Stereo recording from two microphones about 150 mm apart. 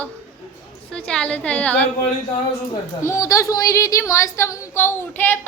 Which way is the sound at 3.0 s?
20° left (ahead or behind).